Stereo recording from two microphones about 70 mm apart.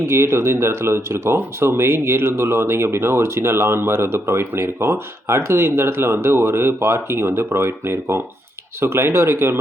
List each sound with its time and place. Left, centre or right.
0.0 s speech: right